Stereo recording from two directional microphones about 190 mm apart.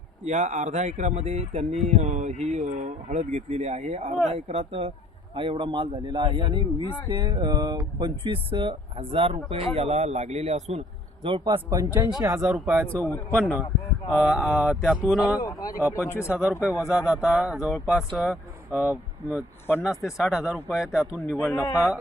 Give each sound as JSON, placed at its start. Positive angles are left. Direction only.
{"t": 0.3, "sound": "speech", "side_deg": -40}
{"t": 12.9, "sound": "a man's voice", "side_deg": 5}
{"t": 15.4, "sound": "a man's voice", "side_deg": 20}
{"t": 16.3, "sound": "speech", "side_deg": -5}
{"t": 21.4, "sound": "a man's voice", "side_deg": 10}